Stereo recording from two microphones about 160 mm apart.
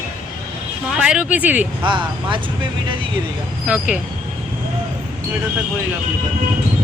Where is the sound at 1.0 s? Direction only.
5° right (ahead or behind).